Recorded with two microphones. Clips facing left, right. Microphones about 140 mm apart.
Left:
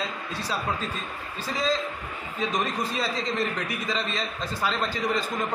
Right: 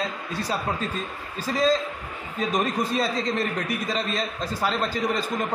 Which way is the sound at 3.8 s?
40° right (ahead or behind).